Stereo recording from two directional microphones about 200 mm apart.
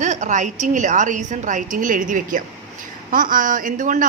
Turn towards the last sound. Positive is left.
turn(degrees=-40)  # may be behind; listen again after turning